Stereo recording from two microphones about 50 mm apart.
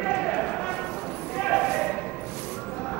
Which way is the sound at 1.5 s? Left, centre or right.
Centre.